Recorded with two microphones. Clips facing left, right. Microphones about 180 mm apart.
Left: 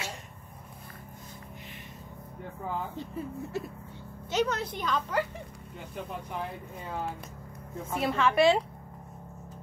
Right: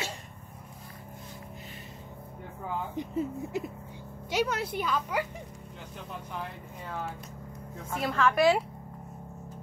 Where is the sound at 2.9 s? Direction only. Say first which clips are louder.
Right 5 dB; 15° right (ahead or behind).